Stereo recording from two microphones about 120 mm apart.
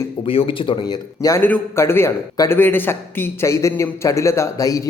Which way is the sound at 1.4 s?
15° left (ahead or behind).